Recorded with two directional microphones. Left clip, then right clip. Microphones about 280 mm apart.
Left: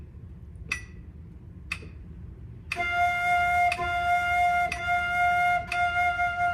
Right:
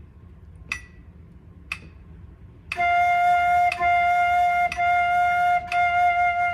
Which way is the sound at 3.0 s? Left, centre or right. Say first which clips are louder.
Right 4 dB; centre.